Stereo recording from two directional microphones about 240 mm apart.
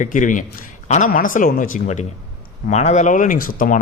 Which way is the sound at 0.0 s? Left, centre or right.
Left.